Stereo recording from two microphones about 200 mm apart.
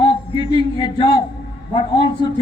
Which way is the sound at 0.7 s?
20° left (ahead or behind).